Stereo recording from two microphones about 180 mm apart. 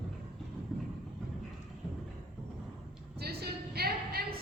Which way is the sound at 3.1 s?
60° right (ahead or behind).